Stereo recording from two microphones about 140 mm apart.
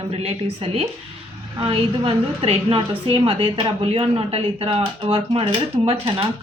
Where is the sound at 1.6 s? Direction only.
40° right (ahead or behind).